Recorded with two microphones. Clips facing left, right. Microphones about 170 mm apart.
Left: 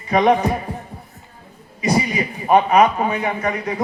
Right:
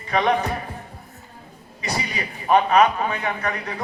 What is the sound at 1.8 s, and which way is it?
A man's voice, 15° left (ahead or behind).